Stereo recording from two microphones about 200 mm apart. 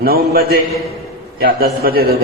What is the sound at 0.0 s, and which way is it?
A man's voice, 50° right (ahead or behind).